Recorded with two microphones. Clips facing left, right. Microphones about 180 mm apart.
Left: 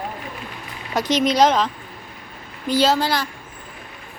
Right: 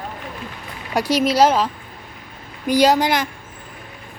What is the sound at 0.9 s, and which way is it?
Speech, 10° right (ahead or behind).